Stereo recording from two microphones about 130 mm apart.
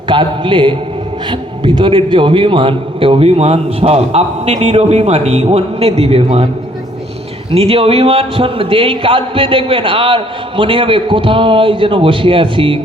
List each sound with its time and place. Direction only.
0.1 s a man's voice: 40° right (ahead or behind)
7.5 s a man's voice: 50° right (ahead or behind)